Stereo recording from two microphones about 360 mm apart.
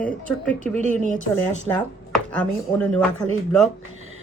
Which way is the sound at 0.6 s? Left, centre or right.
Centre.